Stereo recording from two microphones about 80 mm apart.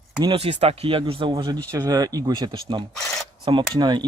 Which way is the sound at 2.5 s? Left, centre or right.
Right.